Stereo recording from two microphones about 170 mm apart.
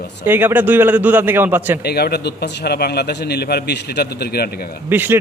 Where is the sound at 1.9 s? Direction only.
70° left (ahead or behind).